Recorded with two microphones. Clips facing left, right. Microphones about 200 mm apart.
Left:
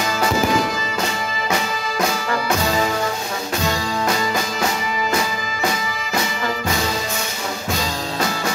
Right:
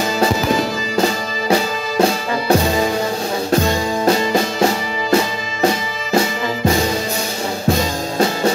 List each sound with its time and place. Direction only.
0.9 s music: 30° right (ahead or behind)
4.0 s music: 30° right (ahead or behind)